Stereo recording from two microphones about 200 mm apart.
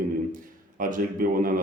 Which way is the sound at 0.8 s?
45° right (ahead or behind).